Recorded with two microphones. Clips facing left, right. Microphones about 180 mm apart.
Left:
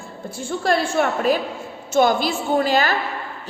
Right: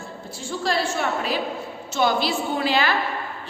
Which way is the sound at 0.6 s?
55° left (ahead or behind).